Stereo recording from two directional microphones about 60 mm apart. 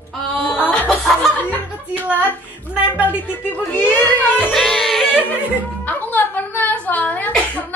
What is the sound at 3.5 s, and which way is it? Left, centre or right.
Music, left.